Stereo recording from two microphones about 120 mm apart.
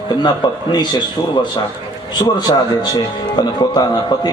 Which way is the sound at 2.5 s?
40° left (ahead or behind).